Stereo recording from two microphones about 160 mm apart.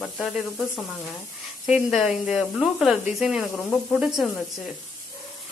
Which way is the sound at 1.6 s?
5° right (ahead or behind).